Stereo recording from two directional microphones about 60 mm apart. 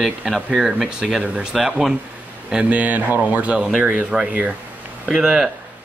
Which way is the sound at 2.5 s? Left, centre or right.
Right.